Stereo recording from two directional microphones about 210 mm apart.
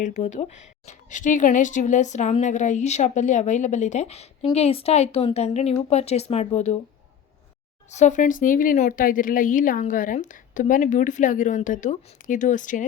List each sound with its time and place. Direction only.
0.0 s speech: 35° left (ahead or behind)
7.9 s speech: 35° left (ahead or behind)